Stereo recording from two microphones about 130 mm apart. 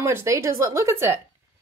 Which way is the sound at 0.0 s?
20° right (ahead or behind).